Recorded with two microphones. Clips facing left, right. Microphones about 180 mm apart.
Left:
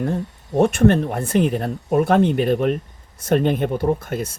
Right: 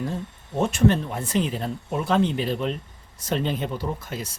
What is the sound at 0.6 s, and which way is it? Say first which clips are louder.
Speech: left 5 dB; 60° left (ahead or behind).